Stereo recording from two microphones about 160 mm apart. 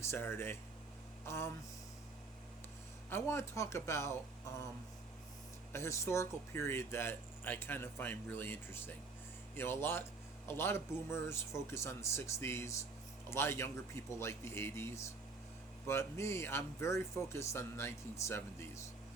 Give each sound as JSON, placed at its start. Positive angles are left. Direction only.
{"t": 0.0, "sound": "speech", "side_deg": 15}
{"t": 1.2, "sound": "a sound", "side_deg": 15}
{"t": 3.1, "sound": "speech", "side_deg": 15}
{"t": 5.7, "sound": "speech", "side_deg": 15}